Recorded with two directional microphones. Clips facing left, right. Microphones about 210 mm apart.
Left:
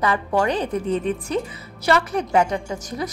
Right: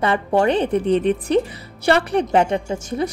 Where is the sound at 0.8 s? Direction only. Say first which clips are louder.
Right 5 dB; 75° right (ahead or behind).